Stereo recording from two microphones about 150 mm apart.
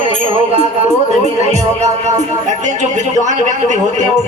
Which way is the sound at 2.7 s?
55° right (ahead or behind).